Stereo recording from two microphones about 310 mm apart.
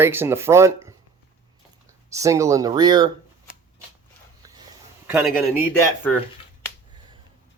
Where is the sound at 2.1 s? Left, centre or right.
Centre.